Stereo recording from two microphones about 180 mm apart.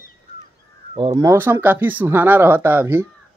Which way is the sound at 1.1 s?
15° right (ahead or behind).